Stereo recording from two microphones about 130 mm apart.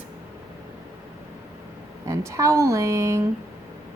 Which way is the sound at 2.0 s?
25° right (ahead or behind).